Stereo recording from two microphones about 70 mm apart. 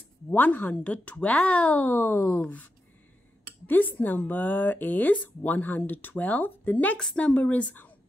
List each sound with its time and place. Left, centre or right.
0.3 s speech: left
3.6 s speech: left